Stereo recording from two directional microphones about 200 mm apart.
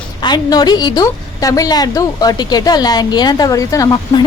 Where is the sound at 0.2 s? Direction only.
20° left (ahead or behind).